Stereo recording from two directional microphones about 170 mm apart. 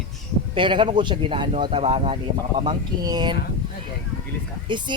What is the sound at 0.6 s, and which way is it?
Speech, 30° right (ahead or behind).